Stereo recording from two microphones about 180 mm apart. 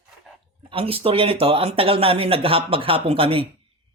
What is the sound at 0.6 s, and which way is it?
Speech, 30° right (ahead or behind).